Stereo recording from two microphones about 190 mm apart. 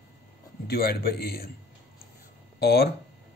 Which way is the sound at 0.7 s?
55° left (ahead or behind).